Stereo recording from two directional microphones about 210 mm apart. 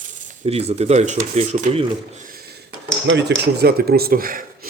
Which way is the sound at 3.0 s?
60° right (ahead or behind).